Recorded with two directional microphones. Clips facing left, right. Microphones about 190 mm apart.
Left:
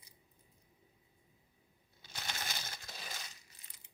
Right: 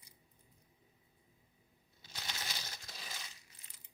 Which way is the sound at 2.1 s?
50° left (ahead or behind).